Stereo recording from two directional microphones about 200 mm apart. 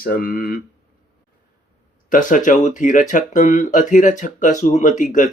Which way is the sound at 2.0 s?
40° left (ahead or behind).